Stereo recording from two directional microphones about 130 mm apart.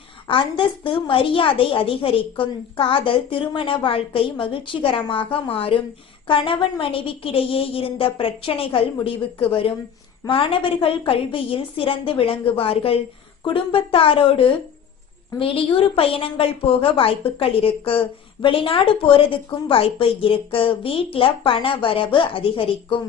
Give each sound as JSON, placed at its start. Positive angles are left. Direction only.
{"t": 0.3, "sound": "a woman's voice", "side_deg": 40}